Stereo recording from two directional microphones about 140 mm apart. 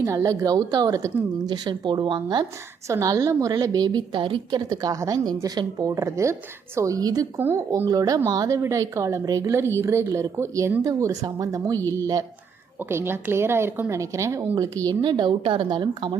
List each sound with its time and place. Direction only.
0.0 s a woman's voice: 25° right (ahead or behind)
2.9 s a woman's voice: 20° right (ahead or behind)
7.3 s a woman's voice: 15° right (ahead or behind)
7.9 s a woman's voice: 25° right (ahead or behind)